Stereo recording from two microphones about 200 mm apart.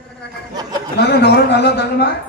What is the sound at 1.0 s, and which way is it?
A man's voice, 55° left (ahead or behind).